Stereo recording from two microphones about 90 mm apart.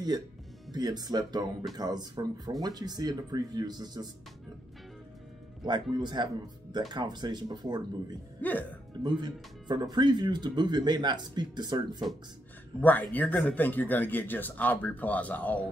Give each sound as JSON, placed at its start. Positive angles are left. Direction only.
{"t": 0.7, "sound": "speech", "side_deg": -50}
{"t": 5.6, "sound": "speech", "side_deg": -55}
{"t": 8.4, "sound": "speech", "side_deg": 20}
{"t": 9.0, "sound": "speech", "side_deg": -55}
{"t": 12.7, "sound": "speech", "side_deg": 20}